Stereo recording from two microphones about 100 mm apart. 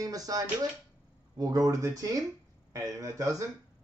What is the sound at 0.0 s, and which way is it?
Speech, 40° right (ahead or behind).